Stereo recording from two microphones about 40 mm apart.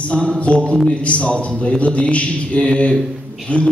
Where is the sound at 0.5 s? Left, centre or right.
Left.